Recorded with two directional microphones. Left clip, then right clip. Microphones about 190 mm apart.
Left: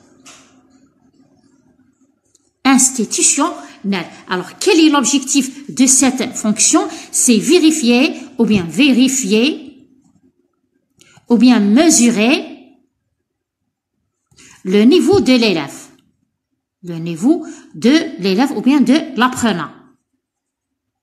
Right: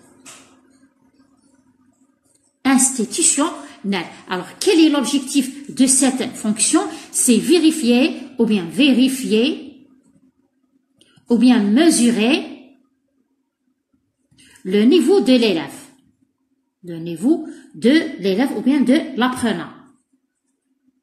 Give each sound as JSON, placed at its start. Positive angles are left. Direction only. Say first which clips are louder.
{"t": 2.6, "sound": "a woman's voice", "louder": "left 4 dB", "side_deg": 35}
{"t": 11.0, "sound": "speech", "louder": "left 4 dB", "side_deg": 35}
{"t": 14.3, "sound": "a woman's voice", "louder": "left 4 dB", "side_deg": 35}